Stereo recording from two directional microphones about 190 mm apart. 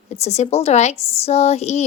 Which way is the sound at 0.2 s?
35° left (ahead or behind).